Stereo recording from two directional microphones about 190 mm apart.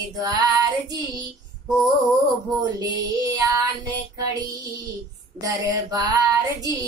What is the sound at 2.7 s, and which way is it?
Female singing, 15° right (ahead or behind).